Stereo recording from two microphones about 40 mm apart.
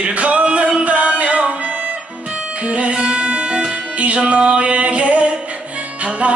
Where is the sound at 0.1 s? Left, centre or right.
Right.